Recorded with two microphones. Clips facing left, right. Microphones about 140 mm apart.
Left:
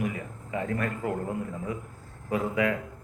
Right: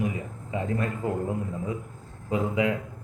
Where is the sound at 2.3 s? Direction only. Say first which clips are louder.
Right 1 dB; 20° right (ahead or behind).